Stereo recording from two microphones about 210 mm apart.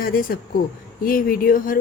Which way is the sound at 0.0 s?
45° left (ahead or behind).